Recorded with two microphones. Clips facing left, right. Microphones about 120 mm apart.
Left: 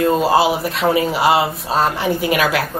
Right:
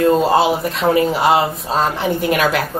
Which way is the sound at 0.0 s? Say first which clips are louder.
Right 1 dB; 5° left (ahead or behind).